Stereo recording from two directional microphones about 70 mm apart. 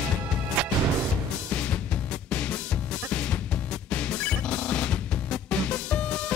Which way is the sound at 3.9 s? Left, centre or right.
Centre.